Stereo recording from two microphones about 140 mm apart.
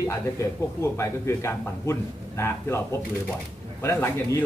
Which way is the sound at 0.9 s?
20° left (ahead or behind).